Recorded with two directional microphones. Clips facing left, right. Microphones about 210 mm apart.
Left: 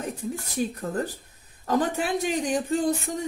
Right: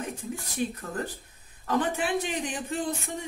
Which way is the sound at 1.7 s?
40° left (ahead or behind).